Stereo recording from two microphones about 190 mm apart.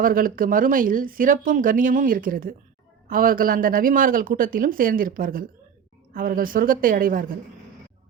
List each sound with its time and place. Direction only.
0.0 s speech: 45° right (ahead or behind)